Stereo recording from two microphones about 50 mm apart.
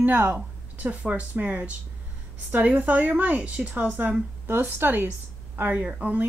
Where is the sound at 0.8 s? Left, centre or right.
Right.